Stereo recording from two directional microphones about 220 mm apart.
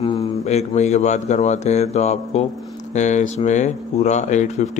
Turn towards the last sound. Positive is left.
turn(degrees=30)  # may be behind; listen again after turning